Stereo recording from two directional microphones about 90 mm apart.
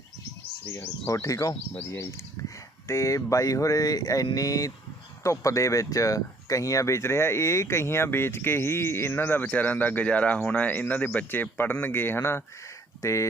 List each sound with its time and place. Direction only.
0.7 s speech: 35° left (ahead or behind)